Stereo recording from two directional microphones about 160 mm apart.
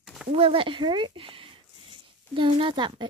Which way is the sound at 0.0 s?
Centre (ahead or behind).